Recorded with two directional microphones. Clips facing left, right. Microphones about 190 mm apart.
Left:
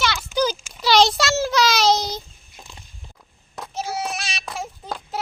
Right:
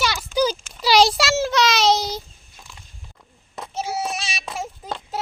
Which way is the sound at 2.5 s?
25° left (ahead or behind).